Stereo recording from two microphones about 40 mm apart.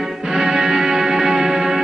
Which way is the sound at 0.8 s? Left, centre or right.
Centre.